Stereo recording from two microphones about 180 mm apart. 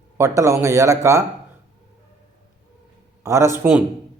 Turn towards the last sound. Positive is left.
turn(degrees=-10)  # may be behind; listen again after turning